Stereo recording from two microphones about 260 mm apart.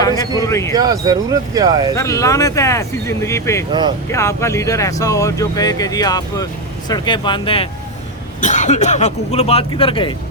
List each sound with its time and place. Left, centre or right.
0.0 s speech: centre
0.7 s speech: centre
2.0 s speech: centre
3.7 s speech: centre
4.1 s speech: centre